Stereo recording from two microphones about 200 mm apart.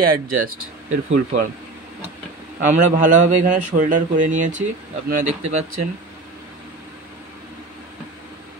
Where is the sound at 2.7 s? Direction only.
40° right (ahead or behind).